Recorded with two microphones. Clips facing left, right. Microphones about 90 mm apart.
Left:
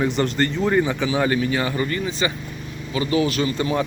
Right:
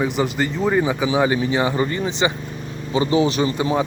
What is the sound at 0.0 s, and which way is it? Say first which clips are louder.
Speech: even; 5° right (ahead or behind).